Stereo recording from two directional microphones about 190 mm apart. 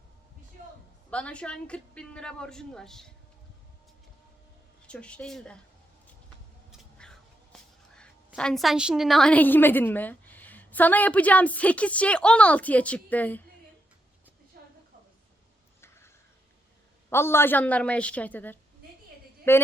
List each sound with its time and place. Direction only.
1.1 s a woman's voice: 5° left (ahead or behind)
4.9 s a woman's voice: 5° left (ahead or behind)
6.7 s speech: 5° left (ahead or behind)
14.5 s a sound: 50° right (ahead or behind)
17.1 s a woman's voice: 10° left (ahead or behind)